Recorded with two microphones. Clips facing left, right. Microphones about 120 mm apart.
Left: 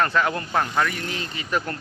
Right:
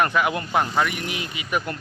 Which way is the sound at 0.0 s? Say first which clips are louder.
Right 1 dB; 15° right (ahead or behind).